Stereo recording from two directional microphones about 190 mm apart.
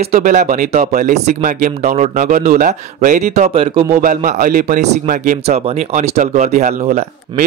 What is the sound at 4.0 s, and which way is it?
Speech, 45° right (ahead or behind).